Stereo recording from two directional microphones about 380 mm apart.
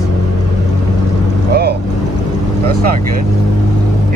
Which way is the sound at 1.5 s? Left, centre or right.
Right.